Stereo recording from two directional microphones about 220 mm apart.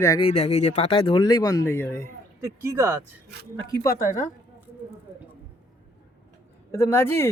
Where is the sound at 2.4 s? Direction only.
15° right (ahead or behind).